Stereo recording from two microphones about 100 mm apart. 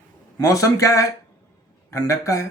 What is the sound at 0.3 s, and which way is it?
Speech, 35° left (ahead or behind).